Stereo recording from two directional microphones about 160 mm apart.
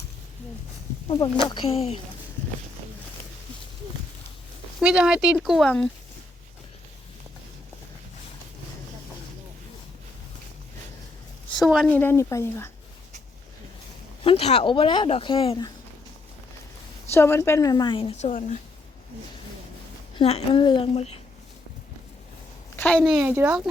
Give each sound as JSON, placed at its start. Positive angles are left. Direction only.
{"t": 1.0, "sound": "speech", "side_deg": 30}
{"t": 4.8, "sound": "speech", "side_deg": -5}
{"t": 11.5, "sound": "speech", "side_deg": 0}
{"t": 11.9, "sound": "speech", "side_deg": 10}
{"t": 14.3, "sound": "speech", "side_deg": 35}
{"t": 17.1, "sound": "a woman's voice", "side_deg": 15}
{"t": 18.3, "sound": "speech", "side_deg": 50}
{"t": 20.1, "sound": "speech", "side_deg": 35}
{"t": 22.7, "sound": "a woman's voice", "side_deg": 10}
{"t": 23.3, "sound": "a child's voice", "side_deg": -10}